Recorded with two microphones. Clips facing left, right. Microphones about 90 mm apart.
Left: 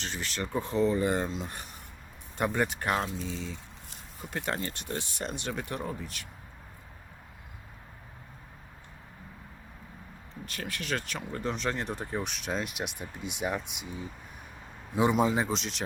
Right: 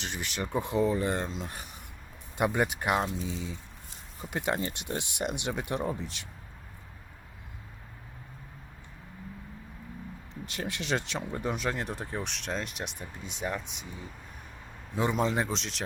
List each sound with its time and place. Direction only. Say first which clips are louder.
0.0 s speech: even; 15° right (ahead or behind)
0.9 s speech: left 2 dB; 5° left (ahead or behind)
2.4 s speech: right 1 dB; 10° right (ahead or behind)
10.4 s speech: right 2 dB; 20° right (ahead or behind); by 13.8 s 10° left (ahead or behind)
14.9 s speech: left 3 dB; 10° left (ahead or behind)